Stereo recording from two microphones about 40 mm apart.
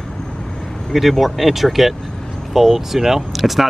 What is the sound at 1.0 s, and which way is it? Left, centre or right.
Speech, centre.